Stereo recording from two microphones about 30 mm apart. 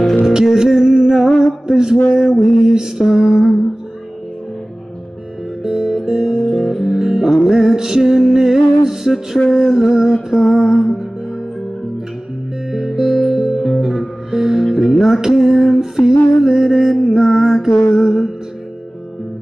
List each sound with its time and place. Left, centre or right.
0.2 s music: centre
1.7 s a sound: right
2.1 s music: centre
3.3 s a sound: right
5.6 s music: centre
6.3 s music: centre
6.9 s music: centre
12.7 s music: centre
15.1 s a sound: centre
17.2 s mantra: centre